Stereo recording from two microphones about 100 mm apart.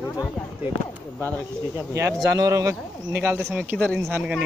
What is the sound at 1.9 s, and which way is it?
Speech, 30° right (ahead or behind).